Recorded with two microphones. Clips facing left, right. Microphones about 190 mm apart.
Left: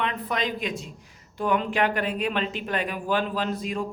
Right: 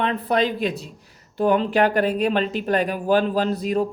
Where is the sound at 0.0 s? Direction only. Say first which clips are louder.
Right 7 dB; 35° right (ahead or behind).